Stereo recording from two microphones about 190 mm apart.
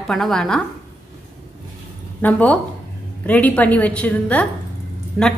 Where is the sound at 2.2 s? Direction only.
10° left (ahead or behind).